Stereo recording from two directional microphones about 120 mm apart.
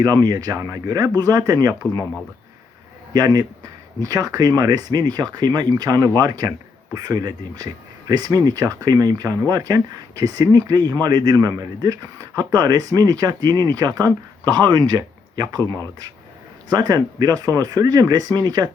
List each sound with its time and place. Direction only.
0.0 s speech: 35° right (ahead or behind)
3.1 s speech: 30° right (ahead or behind)
15.6 s speech: 20° left (ahead or behind)
16.6 s speech: 35° right (ahead or behind)